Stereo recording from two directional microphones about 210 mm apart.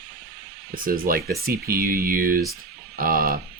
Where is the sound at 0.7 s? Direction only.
45° right (ahead or behind).